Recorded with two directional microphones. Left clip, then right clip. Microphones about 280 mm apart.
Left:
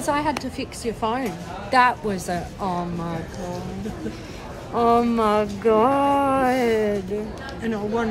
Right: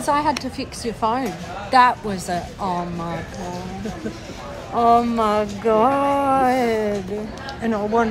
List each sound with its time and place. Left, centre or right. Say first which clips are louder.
0.0 s a woman's voice: right 3 dB; centre
4.7 s a woman's voice: right 3 dB; centre
7.6 s speech: right 5 dB; centre